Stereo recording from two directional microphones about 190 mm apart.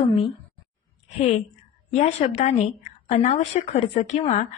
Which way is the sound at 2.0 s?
35° left (ahead or behind).